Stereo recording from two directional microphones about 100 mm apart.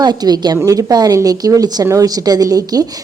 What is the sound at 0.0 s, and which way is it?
Speech, 45° right (ahead or behind).